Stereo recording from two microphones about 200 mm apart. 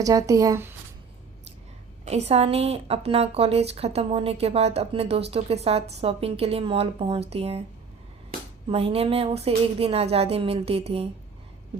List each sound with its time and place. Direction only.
0.0 s speech: 15° right (ahead or behind)
2.0 s a woman's voice: 30° right (ahead or behind)
8.7 s a woman's voice: 30° right (ahead or behind)